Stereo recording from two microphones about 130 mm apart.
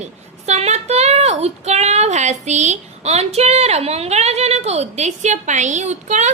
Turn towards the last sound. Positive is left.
turn(degrees=-65)  # may be behind; listen again after turning